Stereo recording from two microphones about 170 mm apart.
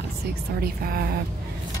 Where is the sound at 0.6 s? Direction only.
65° right (ahead or behind).